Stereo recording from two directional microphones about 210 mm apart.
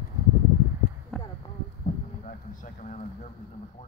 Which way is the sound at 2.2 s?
35° left (ahead or behind).